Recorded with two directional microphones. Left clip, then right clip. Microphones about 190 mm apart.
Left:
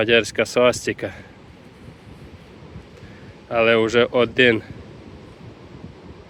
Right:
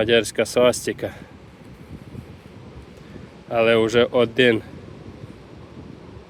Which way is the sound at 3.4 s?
20° right (ahead or behind).